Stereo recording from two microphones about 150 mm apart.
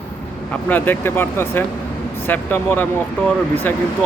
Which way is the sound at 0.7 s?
10° left (ahead or behind).